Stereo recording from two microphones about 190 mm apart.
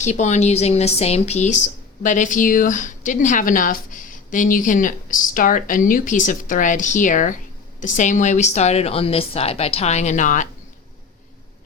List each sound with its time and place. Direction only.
0.0 s a woman's voice: 40° left (ahead or behind)